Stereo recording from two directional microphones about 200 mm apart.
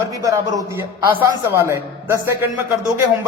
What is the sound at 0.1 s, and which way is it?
A man's voice, 15° right (ahead or behind).